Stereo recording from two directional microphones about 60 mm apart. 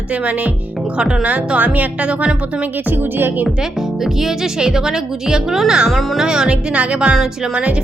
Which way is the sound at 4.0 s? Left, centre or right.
Centre.